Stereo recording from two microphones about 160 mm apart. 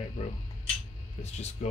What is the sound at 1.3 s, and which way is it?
Speech, 45° left (ahead or behind).